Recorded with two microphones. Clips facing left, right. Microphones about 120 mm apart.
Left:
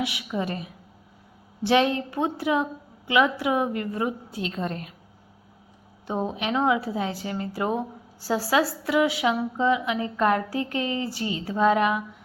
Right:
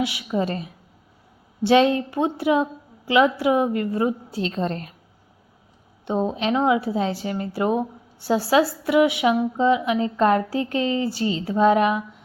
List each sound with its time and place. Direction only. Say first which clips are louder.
0.0 s a woman's voice: right 4 dB; 30° right (ahead or behind)
0.4 s a woman's voice: right 4 dB; 20° left (ahead or behind)
1.6 s a woman's voice: right 4 dB; 25° right (ahead or behind)
6.1 s a woman's voice: right 5 dB; 20° right (ahead or behind)